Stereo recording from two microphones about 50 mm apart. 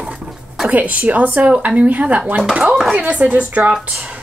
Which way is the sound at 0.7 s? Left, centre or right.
Right.